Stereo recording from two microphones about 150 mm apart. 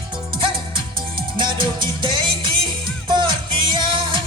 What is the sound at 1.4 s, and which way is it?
Music, 30° right (ahead or behind).